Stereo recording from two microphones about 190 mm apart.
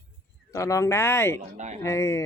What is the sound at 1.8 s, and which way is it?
Speech, 15° left (ahead or behind).